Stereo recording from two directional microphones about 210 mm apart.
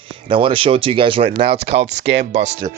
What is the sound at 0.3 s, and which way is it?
Speech, 25° right (ahead or behind).